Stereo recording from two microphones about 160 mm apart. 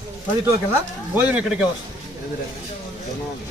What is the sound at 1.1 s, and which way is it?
Speech, 10° right (ahead or behind).